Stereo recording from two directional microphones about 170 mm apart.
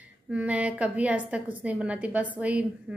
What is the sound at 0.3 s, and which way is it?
A woman's voice, 10° right (ahead or behind).